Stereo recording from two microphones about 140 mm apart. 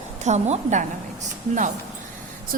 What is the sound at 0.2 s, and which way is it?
Speech, 55° right (ahead or behind).